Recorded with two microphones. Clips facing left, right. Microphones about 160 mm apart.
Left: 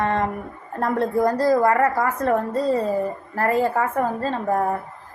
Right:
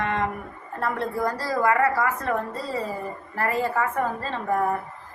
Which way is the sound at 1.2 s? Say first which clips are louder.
Left 5 dB; 45° left (ahead or behind).